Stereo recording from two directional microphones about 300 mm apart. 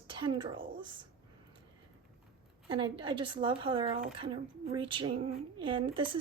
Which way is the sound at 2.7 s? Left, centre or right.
Centre.